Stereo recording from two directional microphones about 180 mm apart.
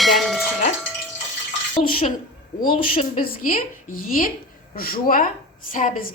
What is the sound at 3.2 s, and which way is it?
A woman's voice, 50° left (ahead or behind).